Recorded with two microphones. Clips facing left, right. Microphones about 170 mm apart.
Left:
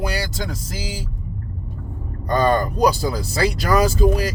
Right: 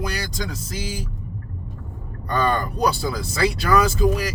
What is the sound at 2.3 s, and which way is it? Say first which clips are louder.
Speech: left 4 dB; 35° left (ahead or behind).